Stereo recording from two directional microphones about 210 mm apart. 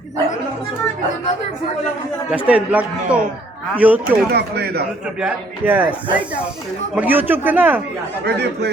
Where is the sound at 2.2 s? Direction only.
5° right (ahead or behind).